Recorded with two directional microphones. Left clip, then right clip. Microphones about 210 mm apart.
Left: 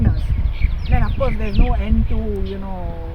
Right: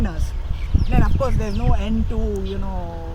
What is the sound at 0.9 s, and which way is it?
Speech, 5° right (ahead or behind).